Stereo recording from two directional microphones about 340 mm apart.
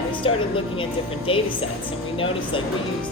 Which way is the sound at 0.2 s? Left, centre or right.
Centre.